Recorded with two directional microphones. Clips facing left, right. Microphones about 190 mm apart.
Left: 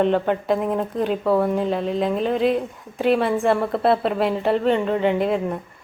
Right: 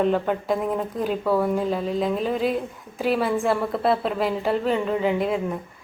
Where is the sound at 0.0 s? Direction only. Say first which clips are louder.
Left 2 dB; centre (ahead or behind).